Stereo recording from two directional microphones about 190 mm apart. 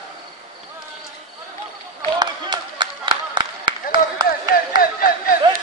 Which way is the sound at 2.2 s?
25° right (ahead or behind).